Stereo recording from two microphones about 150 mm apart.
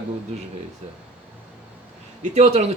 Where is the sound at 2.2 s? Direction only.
50° right (ahead or behind).